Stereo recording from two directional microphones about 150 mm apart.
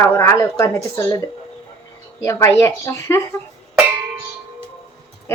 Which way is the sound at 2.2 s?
20° left (ahead or behind).